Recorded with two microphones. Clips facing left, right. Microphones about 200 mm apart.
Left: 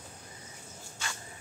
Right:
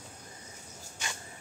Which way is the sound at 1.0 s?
15° right (ahead or behind).